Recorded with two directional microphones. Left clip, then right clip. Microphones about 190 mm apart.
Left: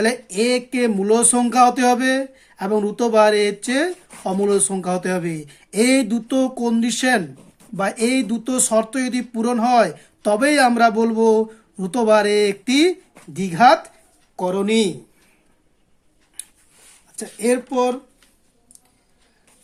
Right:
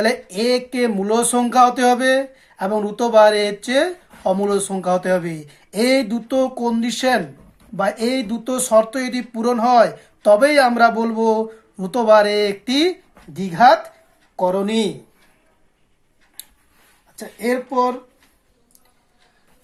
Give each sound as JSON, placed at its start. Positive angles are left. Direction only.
{"t": 0.0, "sound": "speech", "side_deg": 25}
{"t": 17.2, "sound": "speech", "side_deg": 35}